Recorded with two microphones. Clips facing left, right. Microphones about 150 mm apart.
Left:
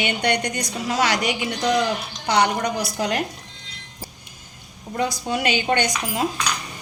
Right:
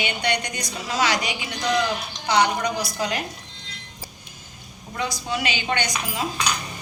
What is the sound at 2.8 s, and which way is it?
Speech, 60° left (ahead or behind).